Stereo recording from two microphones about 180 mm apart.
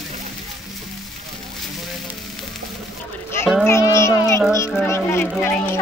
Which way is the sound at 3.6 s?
15° left (ahead or behind).